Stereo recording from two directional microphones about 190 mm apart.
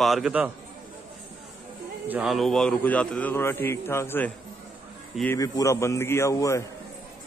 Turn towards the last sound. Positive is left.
turn(degrees=15)  # may be behind; listen again after turning